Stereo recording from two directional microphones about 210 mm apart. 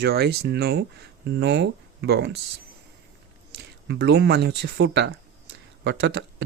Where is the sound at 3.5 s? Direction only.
55° right (ahead or behind).